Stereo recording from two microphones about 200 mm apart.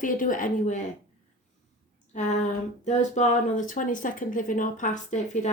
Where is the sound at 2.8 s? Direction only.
35° left (ahead or behind).